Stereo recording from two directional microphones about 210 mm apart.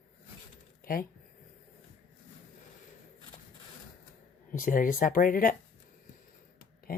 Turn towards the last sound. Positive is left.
turn(degrees=45)  # may be behind; listen again after turning